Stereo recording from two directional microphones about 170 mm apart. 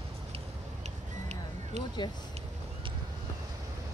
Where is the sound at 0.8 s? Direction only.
40° right (ahead or behind).